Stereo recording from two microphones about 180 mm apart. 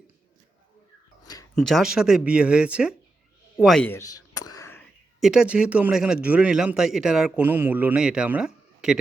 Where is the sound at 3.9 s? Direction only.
15° left (ahead or behind).